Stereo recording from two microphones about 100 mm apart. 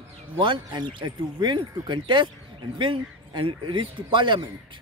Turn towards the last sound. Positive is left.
turn(degrees=-50)  # may be behind; listen again after turning